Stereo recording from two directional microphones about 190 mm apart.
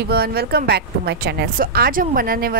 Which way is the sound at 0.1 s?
55° right (ahead or behind).